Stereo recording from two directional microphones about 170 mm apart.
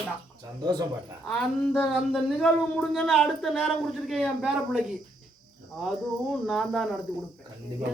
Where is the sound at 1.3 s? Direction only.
10° left (ahead or behind).